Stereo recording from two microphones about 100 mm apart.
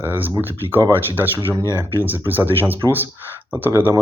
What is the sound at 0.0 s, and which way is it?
Speech, 20° right (ahead or behind).